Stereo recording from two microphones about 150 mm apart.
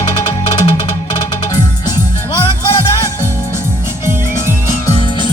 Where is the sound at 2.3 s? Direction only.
25° left (ahead or behind).